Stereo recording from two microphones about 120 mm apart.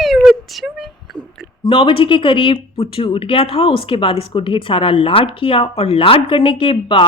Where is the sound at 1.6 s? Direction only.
45° left (ahead or behind).